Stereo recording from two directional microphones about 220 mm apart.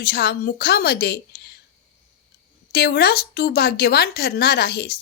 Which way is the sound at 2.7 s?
45° left (ahead or behind).